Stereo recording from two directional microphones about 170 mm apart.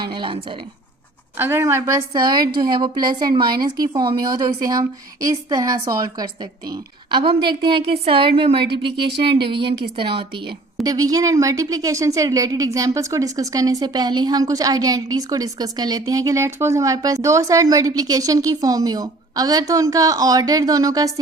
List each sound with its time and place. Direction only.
0.0 s a woman's voice: 30° right (ahead or behind)
1.4 s a woman's voice: 15° right (ahead or behind)